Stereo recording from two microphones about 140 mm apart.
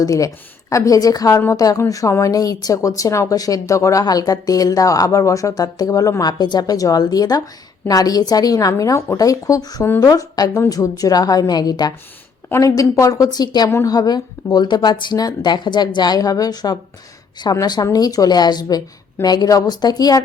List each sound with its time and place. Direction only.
0.0 s a woman's voice: 25° left (ahead or behind)